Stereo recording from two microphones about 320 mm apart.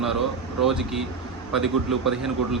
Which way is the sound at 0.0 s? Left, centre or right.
Centre.